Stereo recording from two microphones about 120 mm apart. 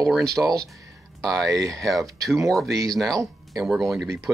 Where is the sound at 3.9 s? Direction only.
25° right (ahead or behind).